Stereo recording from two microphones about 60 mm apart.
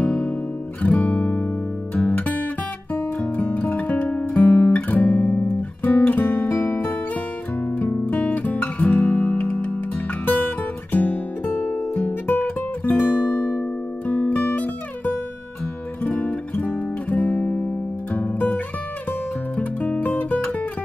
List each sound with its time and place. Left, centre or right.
0.0 s music: left
0.8 s guitar: left
2.0 s music: left
3.2 s guitar: left
9.1 s music: left
16.0 s guitar: left
19.5 s music: left